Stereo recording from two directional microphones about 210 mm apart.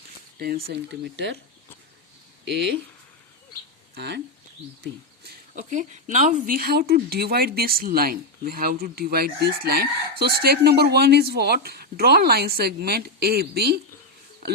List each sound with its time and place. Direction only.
0.3 s speech: 45° right (ahead or behind)
2.4 s speech: 55° right (ahead or behind)
3.9 s speech: 50° right (ahead or behind)